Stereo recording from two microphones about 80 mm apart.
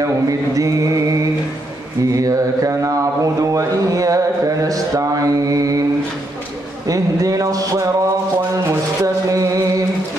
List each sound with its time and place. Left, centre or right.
0.0 s mantra: right
2.1 s mantra: right
6.9 s mantra: right
8.6 s music: right